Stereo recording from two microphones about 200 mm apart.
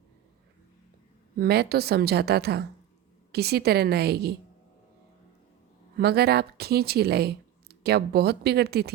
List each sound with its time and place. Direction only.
1.4 s speech: 55° right (ahead or behind)
6.0 s speech: 55° right (ahead or behind)